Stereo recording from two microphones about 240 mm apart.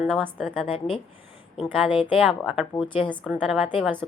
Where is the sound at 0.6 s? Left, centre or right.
Left.